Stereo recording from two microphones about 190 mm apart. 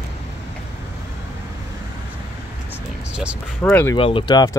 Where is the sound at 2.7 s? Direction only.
5° right (ahead or behind).